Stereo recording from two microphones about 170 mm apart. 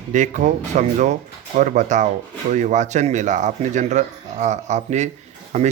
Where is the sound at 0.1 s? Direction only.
45° right (ahead or behind).